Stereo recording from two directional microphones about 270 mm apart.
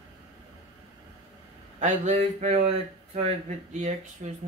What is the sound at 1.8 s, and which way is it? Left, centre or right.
Speech, right.